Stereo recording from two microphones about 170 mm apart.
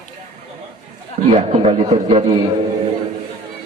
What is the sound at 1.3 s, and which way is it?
A man's voice, 35° right (ahead or behind).